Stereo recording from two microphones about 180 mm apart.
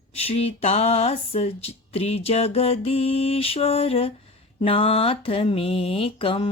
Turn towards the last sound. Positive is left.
turn(degrees=30)  # may be behind; listen again after turning